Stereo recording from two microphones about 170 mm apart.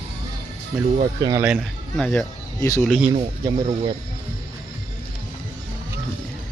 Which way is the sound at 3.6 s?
35° right (ahead or behind).